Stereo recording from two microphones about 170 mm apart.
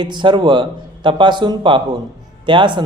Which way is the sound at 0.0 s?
25° right (ahead or behind).